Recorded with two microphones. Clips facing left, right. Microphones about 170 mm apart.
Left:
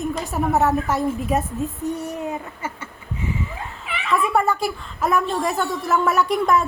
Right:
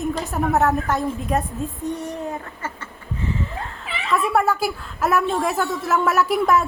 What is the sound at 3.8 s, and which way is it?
A woman's voice, centre (ahead or behind).